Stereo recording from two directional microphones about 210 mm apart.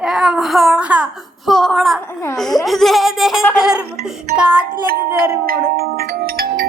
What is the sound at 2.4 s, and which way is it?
Speech, centre (ahead or behind).